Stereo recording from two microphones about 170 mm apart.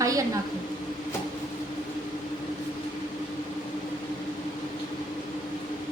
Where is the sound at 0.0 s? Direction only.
20° right (ahead or behind).